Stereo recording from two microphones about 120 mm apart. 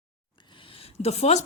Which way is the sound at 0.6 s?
50° left (ahead or behind).